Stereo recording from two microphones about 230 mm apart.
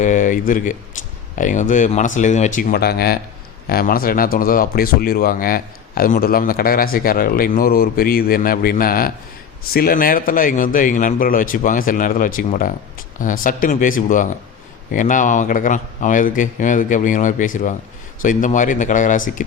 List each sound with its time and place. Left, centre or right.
0.0 s speech: left